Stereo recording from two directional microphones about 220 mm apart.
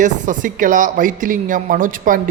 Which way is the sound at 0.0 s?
35° right (ahead or behind).